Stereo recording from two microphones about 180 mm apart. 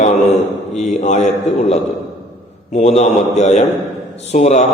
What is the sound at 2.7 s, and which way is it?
A man's voice, 35° left (ahead or behind).